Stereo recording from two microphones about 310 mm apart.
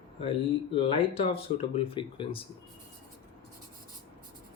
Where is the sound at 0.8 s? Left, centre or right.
Centre.